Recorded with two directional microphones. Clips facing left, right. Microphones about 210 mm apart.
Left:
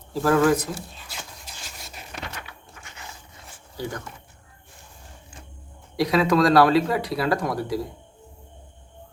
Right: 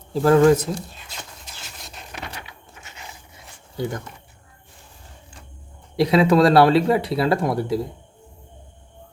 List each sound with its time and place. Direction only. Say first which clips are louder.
0.1 s speech: right 5 dB; 25° right (ahead or behind)
2.5 s a sound: right 1 dB; 20° right (ahead or behind)
6.0 s speech: right 4 dB; 25° right (ahead or behind)